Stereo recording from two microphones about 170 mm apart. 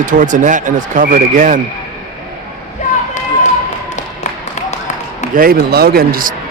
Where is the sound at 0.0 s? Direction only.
50° right (ahead or behind).